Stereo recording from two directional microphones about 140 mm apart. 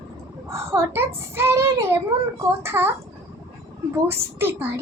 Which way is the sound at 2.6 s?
15° right (ahead or behind).